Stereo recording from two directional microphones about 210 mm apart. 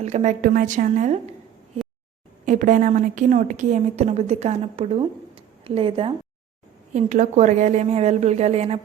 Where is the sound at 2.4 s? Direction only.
35° right (ahead or behind).